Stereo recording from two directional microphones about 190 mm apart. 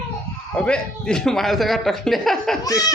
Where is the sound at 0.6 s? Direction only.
5° left (ahead or behind).